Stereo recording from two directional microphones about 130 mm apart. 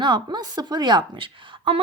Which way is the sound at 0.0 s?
35° right (ahead or behind).